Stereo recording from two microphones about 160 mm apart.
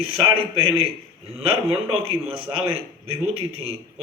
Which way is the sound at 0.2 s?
35° right (ahead or behind).